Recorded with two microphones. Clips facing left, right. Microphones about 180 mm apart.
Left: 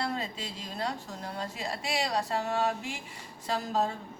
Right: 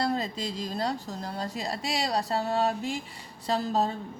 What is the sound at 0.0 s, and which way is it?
A woman's voice, 40° right (ahead or behind).